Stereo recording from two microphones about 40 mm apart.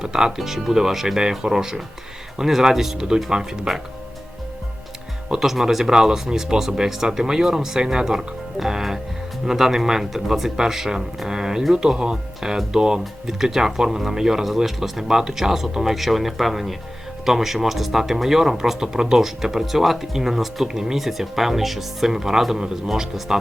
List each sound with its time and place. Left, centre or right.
0.0 s speech: centre
0.3 s speech: centre
5.3 s speech: centre